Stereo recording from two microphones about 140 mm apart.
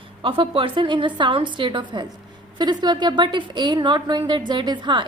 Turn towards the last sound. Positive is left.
turn(degrees=-35)  # may be behind; listen again after turning